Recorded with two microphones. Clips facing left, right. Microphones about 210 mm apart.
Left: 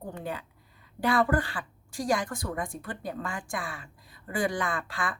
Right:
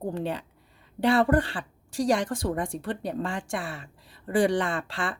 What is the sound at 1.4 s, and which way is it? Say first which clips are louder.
Speech: right 5 dB; 30° right (ahead or behind).